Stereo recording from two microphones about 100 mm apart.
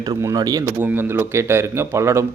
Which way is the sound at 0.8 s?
20° right (ahead or behind).